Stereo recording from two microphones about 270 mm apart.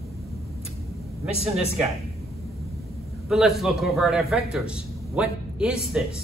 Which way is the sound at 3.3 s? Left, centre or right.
Centre.